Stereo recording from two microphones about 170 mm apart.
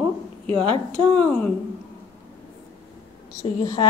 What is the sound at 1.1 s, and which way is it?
Speech, 10° left (ahead or behind).